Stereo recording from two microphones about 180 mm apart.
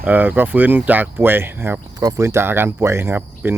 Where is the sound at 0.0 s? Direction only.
10° right (ahead or behind).